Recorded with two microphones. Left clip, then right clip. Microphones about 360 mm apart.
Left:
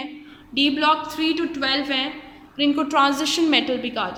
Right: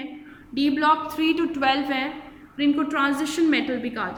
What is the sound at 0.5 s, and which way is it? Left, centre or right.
A woman's voice, centre.